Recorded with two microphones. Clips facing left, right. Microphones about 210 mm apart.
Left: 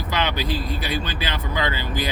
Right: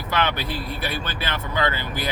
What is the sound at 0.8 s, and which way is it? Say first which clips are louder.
Speech: left 2 dB; 15° left (ahead or behind).